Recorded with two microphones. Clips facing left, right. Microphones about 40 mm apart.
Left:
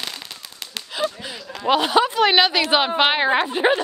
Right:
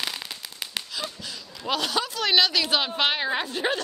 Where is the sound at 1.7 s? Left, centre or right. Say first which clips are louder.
Left 9 dB; left.